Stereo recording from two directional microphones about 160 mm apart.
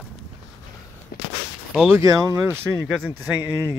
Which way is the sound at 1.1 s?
75° left (ahead or behind).